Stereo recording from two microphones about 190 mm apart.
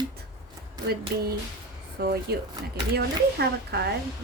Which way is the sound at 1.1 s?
60° right (ahead or behind).